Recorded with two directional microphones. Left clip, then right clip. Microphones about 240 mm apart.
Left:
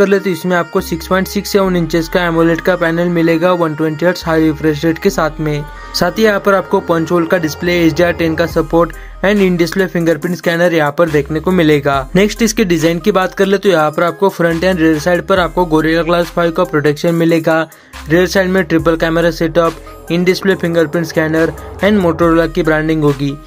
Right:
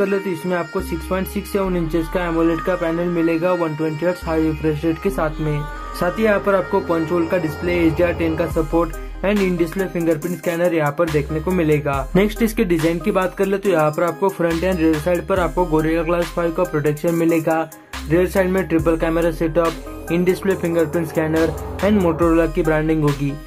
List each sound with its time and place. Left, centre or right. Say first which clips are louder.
0.0 s speech: left 8 dB; centre